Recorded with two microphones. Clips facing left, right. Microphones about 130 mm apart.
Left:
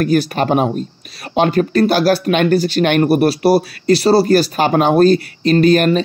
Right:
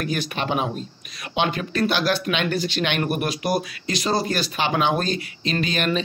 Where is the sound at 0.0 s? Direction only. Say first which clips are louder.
Left 11 dB; 40° left (ahead or behind).